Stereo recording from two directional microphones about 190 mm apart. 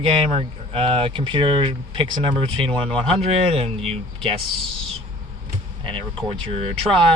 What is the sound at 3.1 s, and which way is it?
Speech, 30° right (ahead or behind).